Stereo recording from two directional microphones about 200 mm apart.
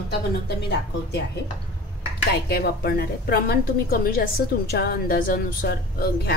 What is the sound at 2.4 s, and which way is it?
A woman's voice, 50° left (ahead or behind).